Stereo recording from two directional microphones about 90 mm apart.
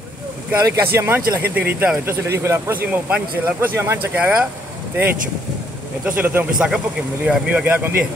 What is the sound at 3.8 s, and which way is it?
Speech, 30° right (ahead or behind).